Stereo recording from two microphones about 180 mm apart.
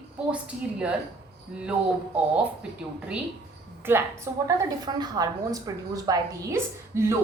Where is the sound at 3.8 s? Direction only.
10° right (ahead or behind).